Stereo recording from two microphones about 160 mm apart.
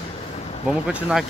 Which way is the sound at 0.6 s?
5° right (ahead or behind).